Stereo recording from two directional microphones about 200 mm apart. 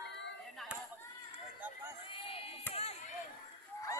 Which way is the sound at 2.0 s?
25° left (ahead or behind).